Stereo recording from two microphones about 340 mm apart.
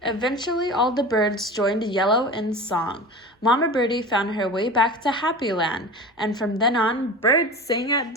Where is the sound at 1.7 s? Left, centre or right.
Centre.